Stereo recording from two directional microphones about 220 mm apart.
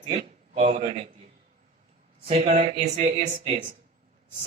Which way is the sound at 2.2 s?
30° right (ahead or behind).